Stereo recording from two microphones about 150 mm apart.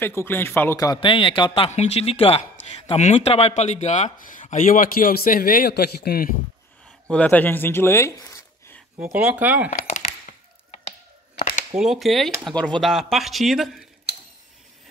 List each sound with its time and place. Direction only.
0.0 s speech: 15° left (ahead or behind); by 6.3 s 85° left
7.1 s speech: 10° left (ahead or behind)
9.0 s speech: 10° right (ahead or behind)
9.7 s a sound: 55° left (ahead or behind)
11.7 s speech: 5° right (ahead or behind)